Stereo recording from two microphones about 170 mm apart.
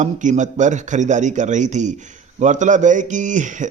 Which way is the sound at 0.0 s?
45° right (ahead or behind).